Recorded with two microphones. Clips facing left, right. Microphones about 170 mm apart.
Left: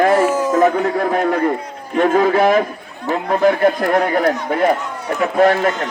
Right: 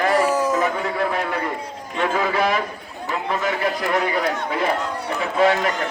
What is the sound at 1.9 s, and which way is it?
Speech, 45° left (ahead or behind).